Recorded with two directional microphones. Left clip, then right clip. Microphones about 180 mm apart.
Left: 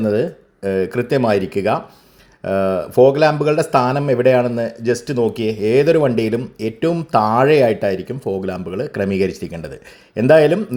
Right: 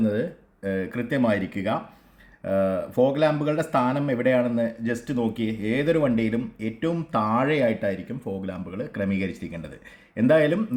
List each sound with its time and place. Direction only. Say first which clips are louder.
0.1 s speech: left 9 dB; 40° left (ahead or behind)